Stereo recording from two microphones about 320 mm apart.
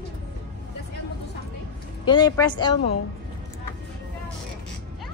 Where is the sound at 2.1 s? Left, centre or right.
Centre.